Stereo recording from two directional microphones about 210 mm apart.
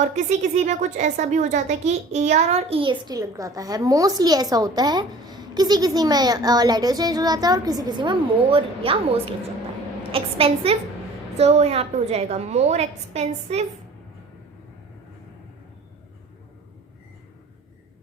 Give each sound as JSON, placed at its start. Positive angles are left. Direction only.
{"t": 0.3, "sound": "a woman's voice", "side_deg": -35}